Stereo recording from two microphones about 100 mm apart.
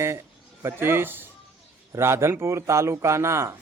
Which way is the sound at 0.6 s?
25° right (ahead or behind).